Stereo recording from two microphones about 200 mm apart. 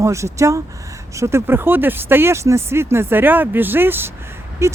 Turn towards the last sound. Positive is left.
turn(degrees=-15)  # may be behind; listen again after turning